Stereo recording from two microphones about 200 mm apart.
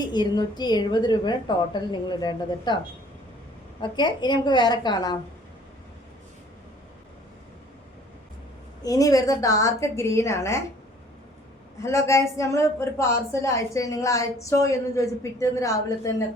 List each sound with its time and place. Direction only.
0.0 s a woman's voice: 20° left (ahead or behind)
3.8 s a woman's voice: 20° left (ahead or behind)
8.8 s speech: 15° left (ahead or behind)
11.8 s speech: 15° left (ahead or behind)